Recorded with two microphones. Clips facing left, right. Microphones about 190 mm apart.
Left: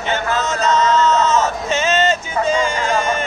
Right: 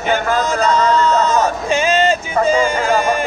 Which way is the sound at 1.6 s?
10° right (ahead or behind).